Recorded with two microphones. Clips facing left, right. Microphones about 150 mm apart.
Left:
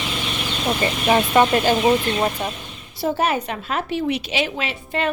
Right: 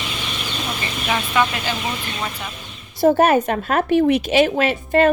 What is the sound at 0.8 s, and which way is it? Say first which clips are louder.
Speech: left 7 dB; 35° left (ahead or behind).